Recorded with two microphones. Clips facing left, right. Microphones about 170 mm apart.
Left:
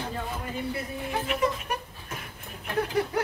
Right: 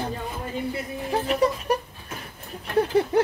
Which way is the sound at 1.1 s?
35° right (ahead or behind).